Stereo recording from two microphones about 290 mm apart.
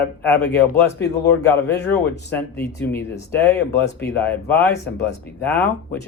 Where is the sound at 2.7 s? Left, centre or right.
Centre.